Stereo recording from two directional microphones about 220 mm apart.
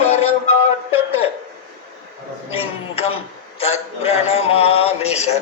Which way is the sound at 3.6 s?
30° left (ahead or behind).